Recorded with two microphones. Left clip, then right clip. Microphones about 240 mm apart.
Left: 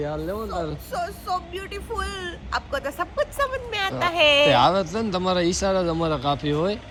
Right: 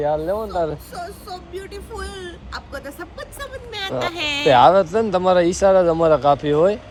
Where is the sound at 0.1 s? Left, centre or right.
Right.